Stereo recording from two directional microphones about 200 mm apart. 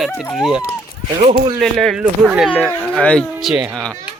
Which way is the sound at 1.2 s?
40° right (ahead or behind).